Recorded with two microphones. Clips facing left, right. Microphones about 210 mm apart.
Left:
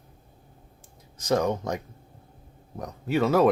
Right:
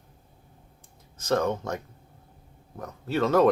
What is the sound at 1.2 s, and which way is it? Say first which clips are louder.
Speech: left 1 dB; 15° left (ahead or behind).